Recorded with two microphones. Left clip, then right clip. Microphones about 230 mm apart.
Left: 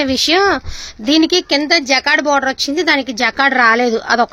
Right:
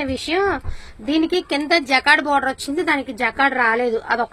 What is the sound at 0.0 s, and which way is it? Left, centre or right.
A woman's voice, left.